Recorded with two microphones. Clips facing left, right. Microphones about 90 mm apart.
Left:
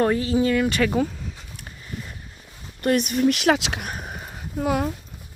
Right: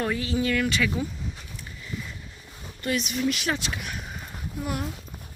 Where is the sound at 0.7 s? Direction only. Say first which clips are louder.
Left 5 dB; 45° left (ahead or behind).